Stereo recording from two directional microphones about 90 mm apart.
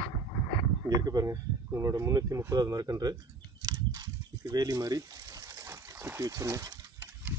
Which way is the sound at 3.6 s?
45° right (ahead or behind).